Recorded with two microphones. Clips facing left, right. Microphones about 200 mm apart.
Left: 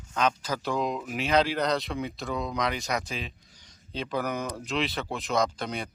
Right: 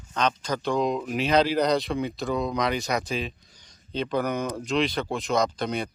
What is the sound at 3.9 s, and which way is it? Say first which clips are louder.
Speech: right 4 dB; 5° left (ahead or behind).